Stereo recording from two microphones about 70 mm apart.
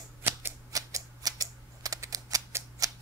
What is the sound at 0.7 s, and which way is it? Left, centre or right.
Typewriter, right.